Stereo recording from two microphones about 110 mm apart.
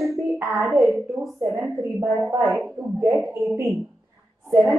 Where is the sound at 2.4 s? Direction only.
Centre (ahead or behind).